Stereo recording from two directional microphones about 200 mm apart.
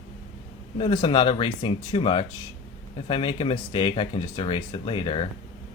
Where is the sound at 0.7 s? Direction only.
25° left (ahead or behind).